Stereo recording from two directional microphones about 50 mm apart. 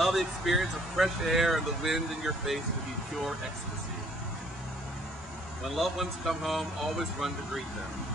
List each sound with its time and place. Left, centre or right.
0.0 s speech: centre
5.8 s speech: centre